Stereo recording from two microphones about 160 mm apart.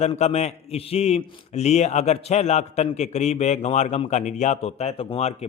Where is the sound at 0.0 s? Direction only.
40° left (ahead or behind).